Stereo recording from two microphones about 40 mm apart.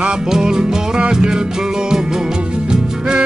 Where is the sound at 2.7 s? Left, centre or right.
Right.